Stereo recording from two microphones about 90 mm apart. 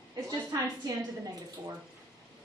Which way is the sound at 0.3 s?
45° right (ahead or behind).